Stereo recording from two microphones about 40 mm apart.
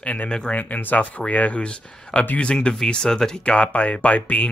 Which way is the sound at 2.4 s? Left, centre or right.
Left.